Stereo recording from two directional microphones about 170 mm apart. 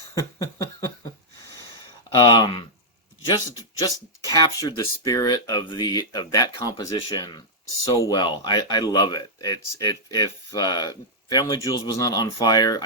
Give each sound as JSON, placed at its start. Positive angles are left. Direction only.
{"t": 0.1, "sound": "a sound", "side_deg": 20}
{"t": 2.1, "sound": "speech", "side_deg": 25}
{"t": 3.8, "sound": "speech", "side_deg": 20}